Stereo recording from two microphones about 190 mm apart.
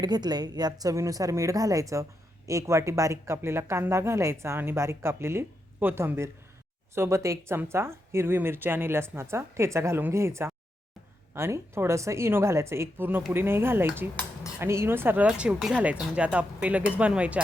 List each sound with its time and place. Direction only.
0.0 s speech: 20° right (ahead or behind)